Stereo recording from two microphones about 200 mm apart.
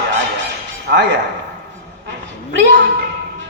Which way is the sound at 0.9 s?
50° right (ahead or behind).